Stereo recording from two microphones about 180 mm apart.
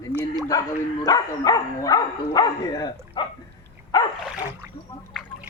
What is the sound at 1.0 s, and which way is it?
Speech, 20° left (ahead or behind).